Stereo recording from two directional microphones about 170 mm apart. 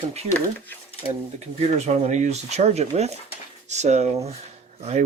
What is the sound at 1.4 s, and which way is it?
Speech, 40° right (ahead or behind).